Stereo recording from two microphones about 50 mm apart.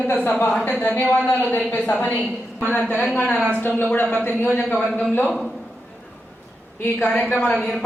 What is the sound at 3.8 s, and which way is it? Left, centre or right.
Speech, left.